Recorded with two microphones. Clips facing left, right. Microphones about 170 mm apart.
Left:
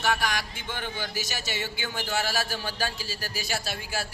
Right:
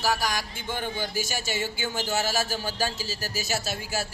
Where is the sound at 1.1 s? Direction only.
50° right (ahead or behind).